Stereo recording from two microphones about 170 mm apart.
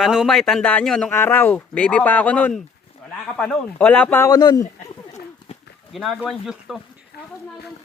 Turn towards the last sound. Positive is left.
turn(degrees=-5)  # may be behind; listen again after turning